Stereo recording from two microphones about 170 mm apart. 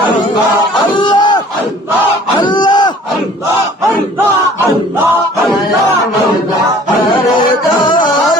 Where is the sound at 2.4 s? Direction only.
25° left (ahead or behind).